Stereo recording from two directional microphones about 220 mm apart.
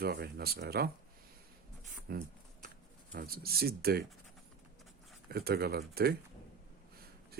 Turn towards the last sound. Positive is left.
turn(degrees=-45)  # may be behind; listen again after turning